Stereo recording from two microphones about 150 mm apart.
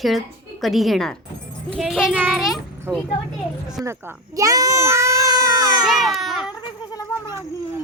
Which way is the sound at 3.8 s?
20° right (ahead or behind).